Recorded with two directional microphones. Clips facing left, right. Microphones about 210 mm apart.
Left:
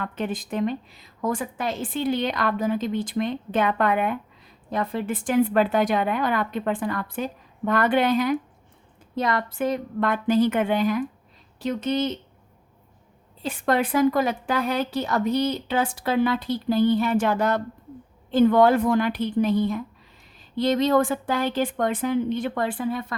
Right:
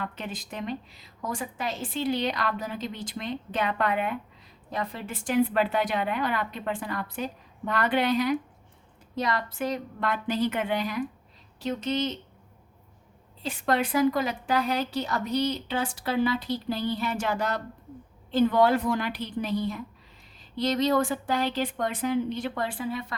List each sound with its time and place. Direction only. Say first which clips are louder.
0.0 s a woman's voice: left 7 dB; 50° left (ahead or behind)
13.4 s a woman's voice: left 3 dB; 55° left (ahead or behind)
20.8 s a woman's voice: left 4 dB; 50° left (ahead or behind)